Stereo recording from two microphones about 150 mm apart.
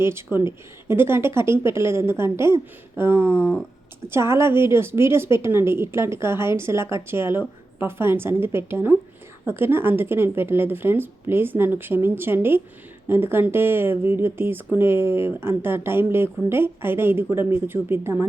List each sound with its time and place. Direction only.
0.0 s speech: 15° right (ahead or behind)